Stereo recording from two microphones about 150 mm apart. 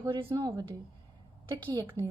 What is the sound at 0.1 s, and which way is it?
Speech, 35° right (ahead or behind).